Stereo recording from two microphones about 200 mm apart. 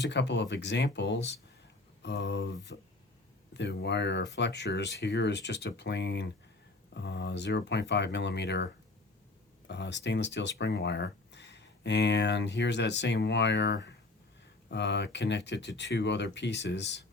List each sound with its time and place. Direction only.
0.0 s speech: 60° left (ahead or behind)